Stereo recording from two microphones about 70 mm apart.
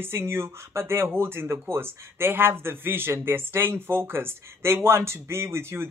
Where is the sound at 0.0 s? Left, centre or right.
Right.